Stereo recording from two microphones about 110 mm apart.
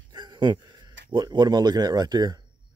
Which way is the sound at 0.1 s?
45° right (ahead or behind).